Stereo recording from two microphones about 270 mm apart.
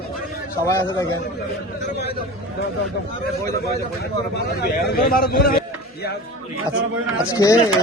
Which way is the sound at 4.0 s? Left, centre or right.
Left.